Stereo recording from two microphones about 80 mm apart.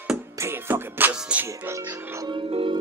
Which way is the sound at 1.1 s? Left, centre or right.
Centre.